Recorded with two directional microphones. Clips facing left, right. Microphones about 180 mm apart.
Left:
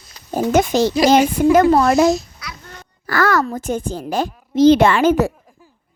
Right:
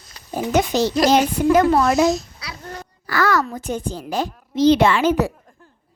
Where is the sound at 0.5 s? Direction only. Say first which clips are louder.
Left 2 dB; 50° left (ahead or behind).